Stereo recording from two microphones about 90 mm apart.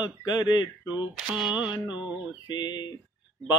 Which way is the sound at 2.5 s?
55° left (ahead or behind).